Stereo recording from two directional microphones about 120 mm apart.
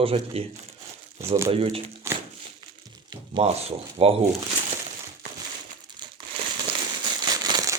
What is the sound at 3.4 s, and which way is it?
Speech, 60° right (ahead or behind).